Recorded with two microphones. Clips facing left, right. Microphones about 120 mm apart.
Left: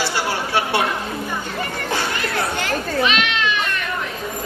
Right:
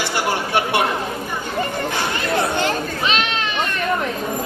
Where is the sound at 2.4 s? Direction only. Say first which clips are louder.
Right 3 dB; 30° right (ahead or behind).